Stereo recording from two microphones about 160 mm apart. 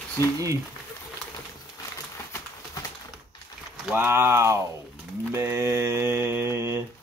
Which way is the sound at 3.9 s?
10° right (ahead or behind).